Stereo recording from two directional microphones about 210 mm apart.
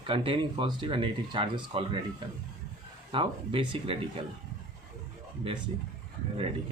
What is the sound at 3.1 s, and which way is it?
Speech, 25° right (ahead or behind).